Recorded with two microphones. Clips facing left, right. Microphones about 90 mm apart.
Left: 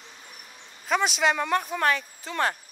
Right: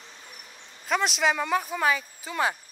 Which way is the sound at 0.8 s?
Centre (ahead or behind).